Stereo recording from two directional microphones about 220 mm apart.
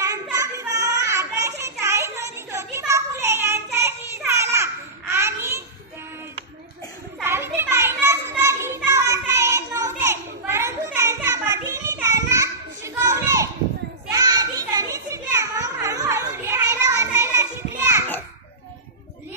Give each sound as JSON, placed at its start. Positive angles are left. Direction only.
{"t": 0.0, "sound": "child singing", "side_deg": -15}
{"t": 4.3, "sound": "babbling", "side_deg": -10}
{"t": 7.2, "sound": "children playing", "side_deg": -10}